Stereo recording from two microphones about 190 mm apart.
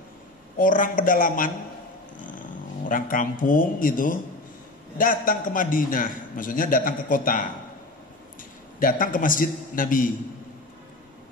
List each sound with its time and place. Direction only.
0.6 s a man's voice: 45° left (ahead or behind)
8.7 s a man's voice: 45° left (ahead or behind)